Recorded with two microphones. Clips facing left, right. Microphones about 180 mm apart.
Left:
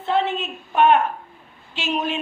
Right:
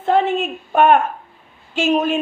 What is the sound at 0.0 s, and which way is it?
A woman's voice, 45° right (ahead or behind).